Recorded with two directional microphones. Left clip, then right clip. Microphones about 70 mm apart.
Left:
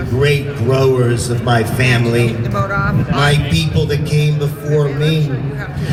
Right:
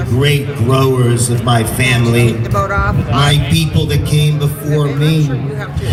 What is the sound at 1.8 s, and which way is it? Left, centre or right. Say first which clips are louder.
A man's voice: right 2 dB; right.